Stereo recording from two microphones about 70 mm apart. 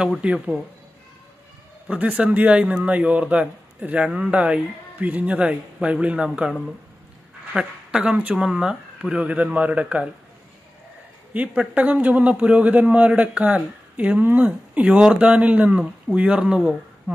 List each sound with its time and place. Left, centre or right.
0.2 s a woman's voice: centre
1.9 s speech: right
7.5 s a woman's voice: centre
11.3 s a woman's voice: centre